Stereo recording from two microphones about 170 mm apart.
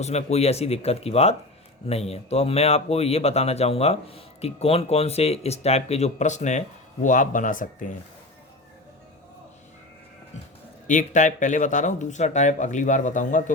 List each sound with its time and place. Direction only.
0.0 s speech: 40° left (ahead or behind)
10.8 s speech: 45° left (ahead or behind)